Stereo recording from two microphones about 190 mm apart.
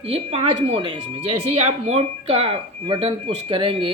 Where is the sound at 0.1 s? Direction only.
30° right (ahead or behind).